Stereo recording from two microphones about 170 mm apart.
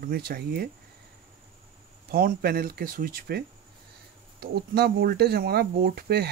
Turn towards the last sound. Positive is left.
turn(degrees=-70)  # may be behind; listen again after turning